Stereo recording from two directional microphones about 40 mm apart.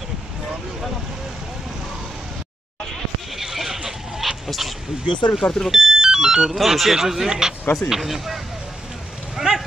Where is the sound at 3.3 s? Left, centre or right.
Centre.